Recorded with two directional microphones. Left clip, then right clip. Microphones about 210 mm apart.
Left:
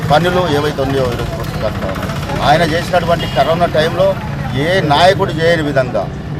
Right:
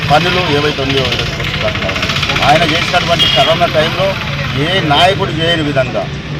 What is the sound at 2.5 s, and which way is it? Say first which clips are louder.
Speech: even; 5° left (ahead or behind).